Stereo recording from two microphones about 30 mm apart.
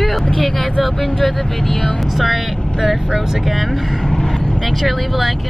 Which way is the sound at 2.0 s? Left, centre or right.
Centre.